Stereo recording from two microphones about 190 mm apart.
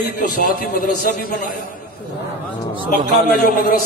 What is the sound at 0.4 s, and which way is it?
Speech, 50° left (ahead or behind).